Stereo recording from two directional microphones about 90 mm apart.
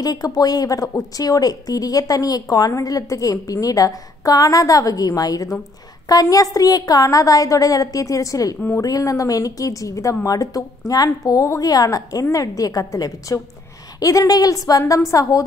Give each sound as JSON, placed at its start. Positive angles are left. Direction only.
{"t": 0.0, "sound": "a woman's voice", "side_deg": 45}